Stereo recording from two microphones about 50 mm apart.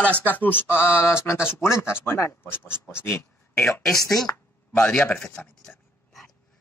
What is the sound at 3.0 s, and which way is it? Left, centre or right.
Speech, left.